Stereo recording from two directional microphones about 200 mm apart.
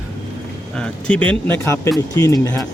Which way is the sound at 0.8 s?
5° left (ahead or behind).